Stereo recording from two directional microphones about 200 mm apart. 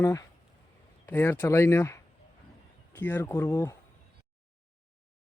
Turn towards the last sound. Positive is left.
turn(degrees=15)  # may be behind; listen again after turning